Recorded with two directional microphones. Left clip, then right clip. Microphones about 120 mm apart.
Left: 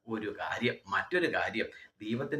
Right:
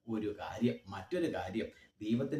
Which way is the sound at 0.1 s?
30° right (ahead or behind).